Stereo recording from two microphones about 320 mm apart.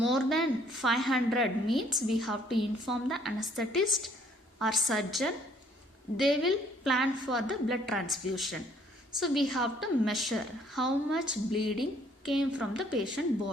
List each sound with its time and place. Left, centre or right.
0.0 s a woman's voice: centre